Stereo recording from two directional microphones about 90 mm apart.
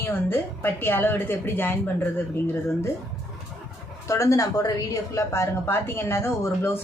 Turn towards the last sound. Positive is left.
turn(degrees=25)  # may be behind; listen again after turning